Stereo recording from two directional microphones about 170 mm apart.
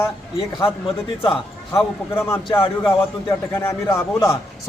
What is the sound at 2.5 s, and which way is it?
Speech, 30° left (ahead or behind).